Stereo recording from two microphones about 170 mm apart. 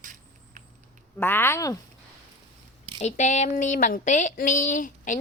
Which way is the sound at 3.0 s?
45° left (ahead or behind).